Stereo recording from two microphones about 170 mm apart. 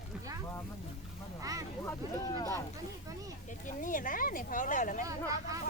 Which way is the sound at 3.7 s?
50° left (ahead or behind).